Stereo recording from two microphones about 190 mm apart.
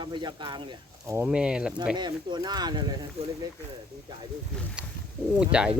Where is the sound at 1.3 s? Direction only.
5° right (ahead or behind).